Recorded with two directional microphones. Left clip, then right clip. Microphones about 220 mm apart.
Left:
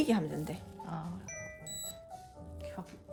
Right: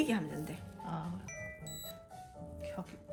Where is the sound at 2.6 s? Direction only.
Centre (ahead or behind).